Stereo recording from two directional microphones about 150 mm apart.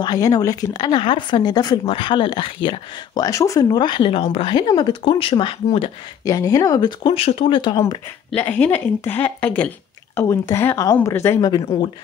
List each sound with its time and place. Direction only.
0.0 s speech: 25° left (ahead or behind)
6.2 s speech: 20° left (ahead or behind)
8.4 s a woman's voice: 10° left (ahead or behind)